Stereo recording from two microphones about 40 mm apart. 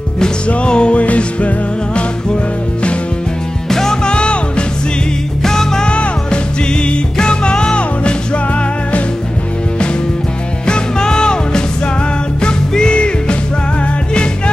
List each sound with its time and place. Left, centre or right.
0.5 s music: left
3.6 s music: centre
5.4 s music: centre
5.9 s music: left
10.7 s music: centre